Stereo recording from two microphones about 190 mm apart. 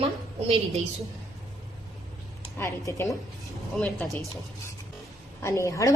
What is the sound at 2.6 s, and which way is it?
Speech, 15° left (ahead or behind).